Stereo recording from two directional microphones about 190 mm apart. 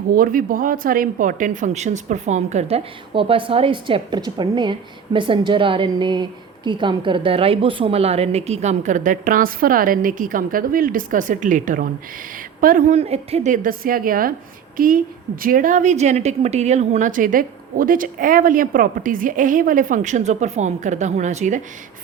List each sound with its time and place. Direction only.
0.1 s a woman's voice: 45° right (ahead or behind)